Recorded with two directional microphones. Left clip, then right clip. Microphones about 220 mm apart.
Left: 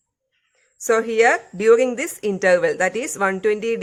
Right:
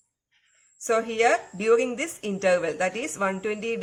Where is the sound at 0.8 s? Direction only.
45° left (ahead or behind).